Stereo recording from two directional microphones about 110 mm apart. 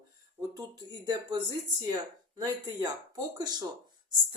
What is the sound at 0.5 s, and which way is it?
Speech, 35° right (ahead or behind).